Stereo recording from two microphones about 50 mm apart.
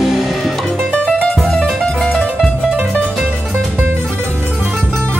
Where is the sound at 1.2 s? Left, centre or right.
Centre.